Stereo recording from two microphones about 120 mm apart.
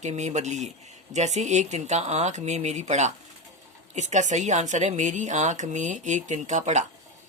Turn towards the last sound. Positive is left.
turn(degrees=-85)